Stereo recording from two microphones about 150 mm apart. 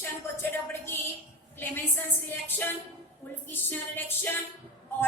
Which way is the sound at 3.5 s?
15° left (ahead or behind).